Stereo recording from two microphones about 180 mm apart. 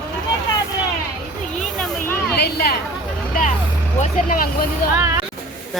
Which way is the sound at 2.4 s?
60° left (ahead or behind).